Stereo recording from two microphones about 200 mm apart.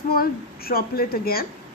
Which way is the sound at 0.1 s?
50° left (ahead or behind).